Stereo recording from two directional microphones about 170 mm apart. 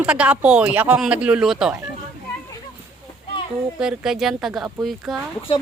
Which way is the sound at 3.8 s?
5° right (ahead or behind).